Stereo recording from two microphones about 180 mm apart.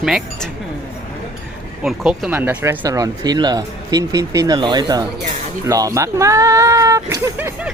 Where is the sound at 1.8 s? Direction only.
Centre (ahead or behind).